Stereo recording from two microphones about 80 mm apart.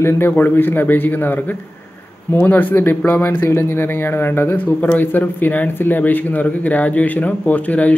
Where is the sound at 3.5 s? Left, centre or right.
Left.